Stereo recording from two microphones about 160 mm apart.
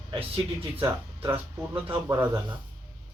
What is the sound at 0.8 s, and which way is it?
Speech, 15° right (ahead or behind).